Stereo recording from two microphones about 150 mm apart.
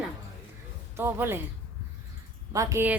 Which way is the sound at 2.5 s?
20° right (ahead or behind).